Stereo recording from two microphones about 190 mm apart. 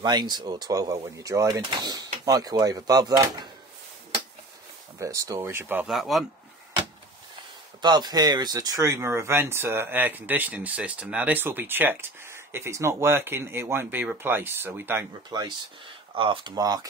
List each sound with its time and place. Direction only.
0.0 s speech: 20° right (ahead or behind)
4.9 s speech: 15° right (ahead or behind); by 6.2 s centre (ahead or behind)
7.8 s speech: 20° right (ahead or behind)
15.2 s speech: 20° right (ahead or behind)